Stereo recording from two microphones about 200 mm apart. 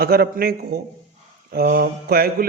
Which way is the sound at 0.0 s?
50° right (ahead or behind).